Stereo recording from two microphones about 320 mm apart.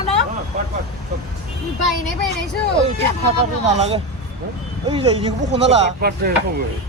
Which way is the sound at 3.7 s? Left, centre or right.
Centre.